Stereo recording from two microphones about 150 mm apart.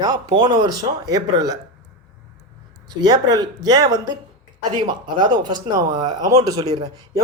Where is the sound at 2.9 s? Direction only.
25° right (ahead or behind).